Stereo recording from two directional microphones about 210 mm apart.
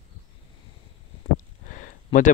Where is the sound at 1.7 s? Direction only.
40° left (ahead or behind).